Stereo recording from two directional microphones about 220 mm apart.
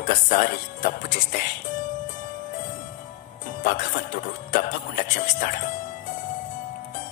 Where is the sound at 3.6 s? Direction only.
40° left (ahead or behind).